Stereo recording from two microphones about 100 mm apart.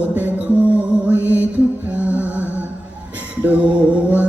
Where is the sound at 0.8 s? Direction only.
15° right (ahead or behind).